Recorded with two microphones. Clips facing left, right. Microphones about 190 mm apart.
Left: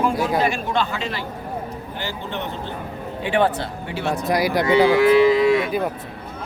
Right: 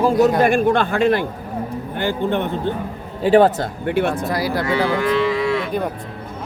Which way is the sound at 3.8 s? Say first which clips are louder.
Right 7 dB; 55° right (ahead or behind).